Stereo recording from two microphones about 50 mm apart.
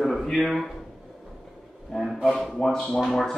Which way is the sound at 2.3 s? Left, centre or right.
Centre.